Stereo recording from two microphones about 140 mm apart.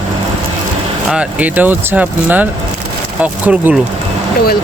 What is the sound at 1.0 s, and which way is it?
Speech, 10° right (ahead or behind).